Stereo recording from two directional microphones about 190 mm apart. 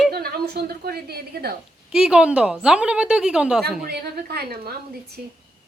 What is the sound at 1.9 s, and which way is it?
A woman's voice, 5° right (ahead or behind).